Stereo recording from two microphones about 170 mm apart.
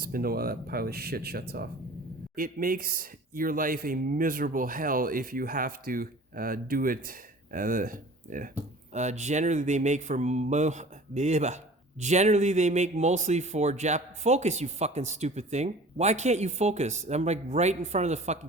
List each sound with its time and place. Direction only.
0.0 s speech: 60° right (ahead or behind); by 18.3 s 40° right (ahead or behind)